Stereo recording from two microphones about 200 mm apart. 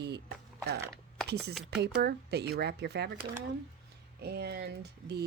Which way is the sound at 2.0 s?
55° right (ahead or behind).